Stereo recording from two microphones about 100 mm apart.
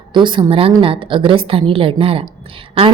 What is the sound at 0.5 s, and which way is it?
A woman's voice, 65° right (ahead or behind).